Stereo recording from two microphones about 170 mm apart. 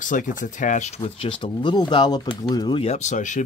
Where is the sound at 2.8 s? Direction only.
40° left (ahead or behind).